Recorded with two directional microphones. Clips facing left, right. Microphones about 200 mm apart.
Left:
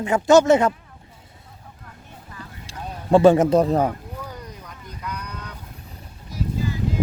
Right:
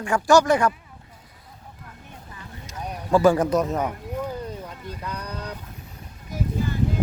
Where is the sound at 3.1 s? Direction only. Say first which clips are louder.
Left 4 dB; 25° left (ahead or behind).